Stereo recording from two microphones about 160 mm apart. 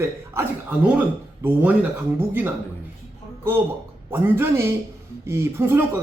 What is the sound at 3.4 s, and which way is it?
Speech, 15° right (ahead or behind).